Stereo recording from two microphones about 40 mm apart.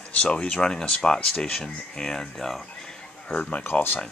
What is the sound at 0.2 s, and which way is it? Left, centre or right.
Speech, left.